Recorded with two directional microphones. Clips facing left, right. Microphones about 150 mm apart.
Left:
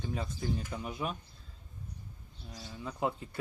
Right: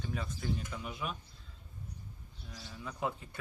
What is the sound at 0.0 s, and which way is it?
Speech, 25° left (ahead or behind).